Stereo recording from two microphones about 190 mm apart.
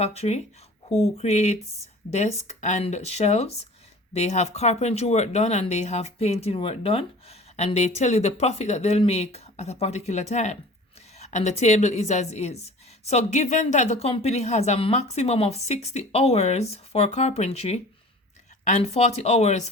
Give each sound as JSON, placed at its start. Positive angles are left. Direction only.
{"t": 0.0, "sound": "a woman's voice", "side_deg": 35}